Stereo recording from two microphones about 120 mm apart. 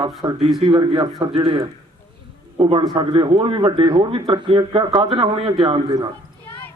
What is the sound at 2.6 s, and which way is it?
Speech, 50° right (ahead or behind).